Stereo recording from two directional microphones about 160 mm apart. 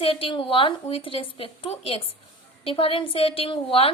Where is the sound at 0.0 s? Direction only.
35° left (ahead or behind).